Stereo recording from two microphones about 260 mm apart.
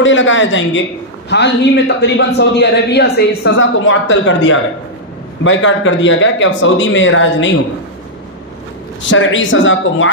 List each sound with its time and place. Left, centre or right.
0.0 s a man's voice: left
9.1 s a man's voice: left